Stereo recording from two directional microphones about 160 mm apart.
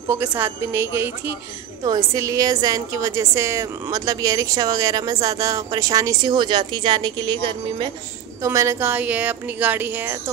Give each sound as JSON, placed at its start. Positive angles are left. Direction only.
{"t": 0.1, "sound": "a woman's voice", "side_deg": -15}
{"t": 8.4, "sound": "a woman's voice", "side_deg": -20}